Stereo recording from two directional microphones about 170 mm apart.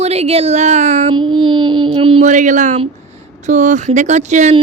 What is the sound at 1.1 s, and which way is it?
Child singing, 25° right (ahead or behind).